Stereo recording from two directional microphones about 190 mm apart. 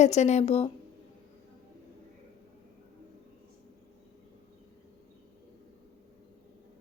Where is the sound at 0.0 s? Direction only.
35° left (ahead or behind).